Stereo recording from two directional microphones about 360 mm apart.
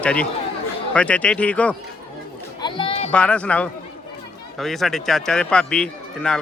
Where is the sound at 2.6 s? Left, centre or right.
Centre.